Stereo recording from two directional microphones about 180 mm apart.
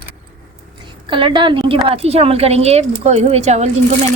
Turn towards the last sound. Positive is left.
turn(degrees=-40)  # may be behind; listen again after turning